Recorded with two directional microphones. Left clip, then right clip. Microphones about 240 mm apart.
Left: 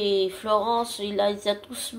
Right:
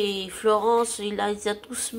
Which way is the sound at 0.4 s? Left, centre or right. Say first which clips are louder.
Right 6 dB; right.